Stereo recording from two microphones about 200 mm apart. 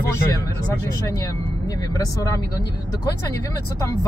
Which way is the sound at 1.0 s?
15° left (ahead or behind).